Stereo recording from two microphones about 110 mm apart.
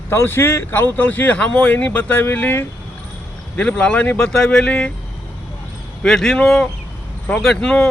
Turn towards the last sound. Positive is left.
turn(degrees=10)  # may be behind; listen again after turning